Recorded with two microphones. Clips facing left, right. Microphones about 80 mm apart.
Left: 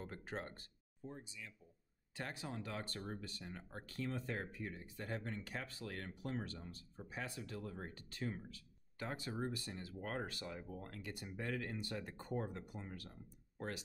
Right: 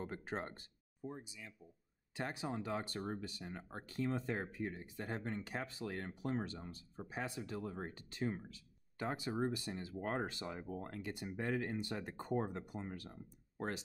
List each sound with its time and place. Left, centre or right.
0.0 s speech: right